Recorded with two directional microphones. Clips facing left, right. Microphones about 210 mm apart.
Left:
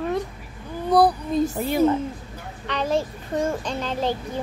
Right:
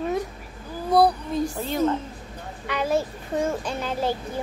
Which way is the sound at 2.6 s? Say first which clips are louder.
Even; 10° right (ahead or behind).